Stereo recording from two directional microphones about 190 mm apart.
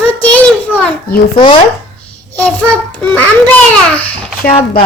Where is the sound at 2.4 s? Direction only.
5° left (ahead or behind).